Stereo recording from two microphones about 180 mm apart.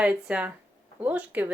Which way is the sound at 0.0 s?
5° right (ahead or behind).